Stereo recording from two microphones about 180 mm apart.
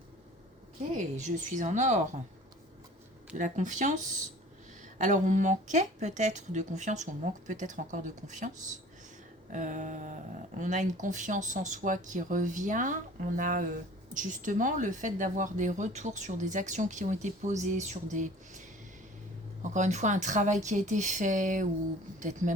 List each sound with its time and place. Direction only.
1.1 s a woman's voice: 40° right (ahead or behind)
3.3 s speech: 45° right (ahead or behind)
9.5 s speech: 45° right (ahead or behind)
19.7 s speech: 40° right (ahead or behind)